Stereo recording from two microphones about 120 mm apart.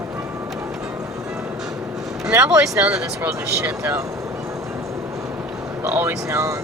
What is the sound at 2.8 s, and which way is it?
Speech, 10° right (ahead or behind).